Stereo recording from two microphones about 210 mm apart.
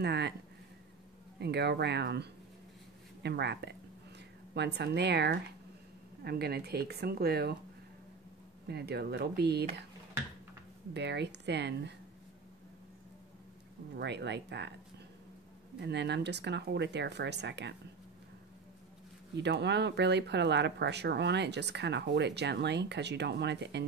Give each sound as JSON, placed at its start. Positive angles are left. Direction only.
{"t": 0.0, "sound": "speech", "side_deg": -50}
{"t": 1.4, "sound": "speech", "side_deg": -50}
{"t": 8.6, "sound": "speech", "side_deg": -50}
{"t": 10.9, "sound": "speech", "side_deg": -55}
{"t": 13.9, "sound": "speech", "side_deg": -55}
{"t": 15.8, "sound": "speech", "side_deg": -55}
{"t": 19.3, "sound": "speech", "side_deg": -55}